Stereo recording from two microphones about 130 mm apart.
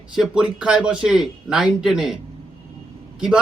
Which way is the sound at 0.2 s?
5° right (ahead or behind).